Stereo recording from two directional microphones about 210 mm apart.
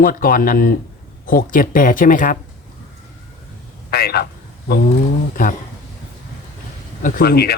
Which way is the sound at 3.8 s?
45° left (ahead or behind).